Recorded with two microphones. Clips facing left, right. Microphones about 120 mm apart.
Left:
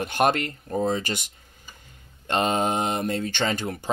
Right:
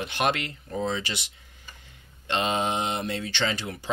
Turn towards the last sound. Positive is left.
turn(degrees=45)  # may be behind; listen again after turning